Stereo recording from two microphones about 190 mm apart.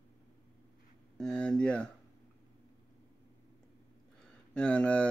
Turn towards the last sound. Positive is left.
turn(degrees=5)  # may be behind; listen again after turning